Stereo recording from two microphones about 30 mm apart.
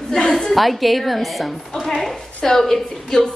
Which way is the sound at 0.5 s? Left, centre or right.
Centre.